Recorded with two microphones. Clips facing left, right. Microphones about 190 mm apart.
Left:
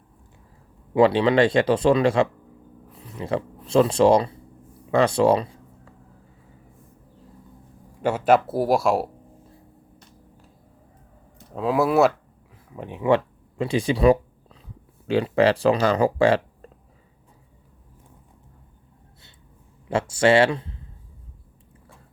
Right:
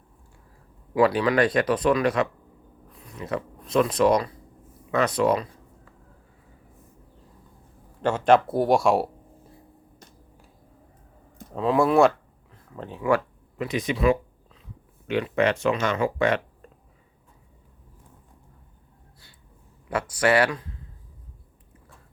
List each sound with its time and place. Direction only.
0.9 s speech: 25° left (ahead or behind)
8.0 s speech: 5° left (ahead or behind)
11.5 s speech: 5° left (ahead or behind)
12.7 s speech: 15° left (ahead or behind); by 16.6 s 30° left (ahead or behind)
19.9 s speech: 25° left (ahead or behind)